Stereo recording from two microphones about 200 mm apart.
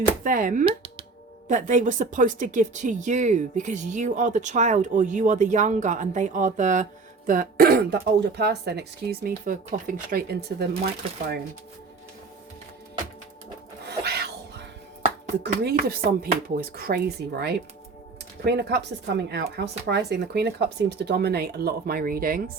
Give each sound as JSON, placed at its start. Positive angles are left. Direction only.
{"t": 0.3, "sound": "speech", "side_deg": -45}
{"t": 0.6, "sound": "a sound", "side_deg": -25}
{"t": 1.5, "sound": "speech", "side_deg": -40}
{"t": 13.8, "sound": "music", "side_deg": -55}
{"t": 15.6, "sound": "speech", "side_deg": -50}